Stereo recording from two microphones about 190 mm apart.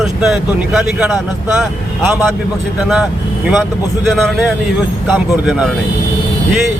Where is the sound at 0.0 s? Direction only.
5° right (ahead or behind).